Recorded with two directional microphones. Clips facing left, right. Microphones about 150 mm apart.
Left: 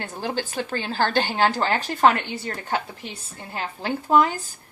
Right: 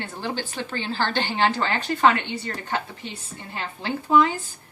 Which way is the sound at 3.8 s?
50° left (ahead or behind).